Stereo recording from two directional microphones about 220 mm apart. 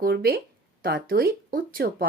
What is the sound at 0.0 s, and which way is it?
Speech, 45° right (ahead or behind).